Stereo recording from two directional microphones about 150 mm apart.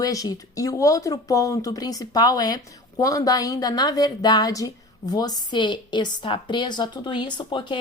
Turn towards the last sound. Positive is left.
turn(degrees=30)  # may be behind; listen again after turning